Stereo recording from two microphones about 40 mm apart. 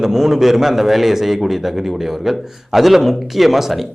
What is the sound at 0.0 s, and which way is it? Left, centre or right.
A man's voice, centre.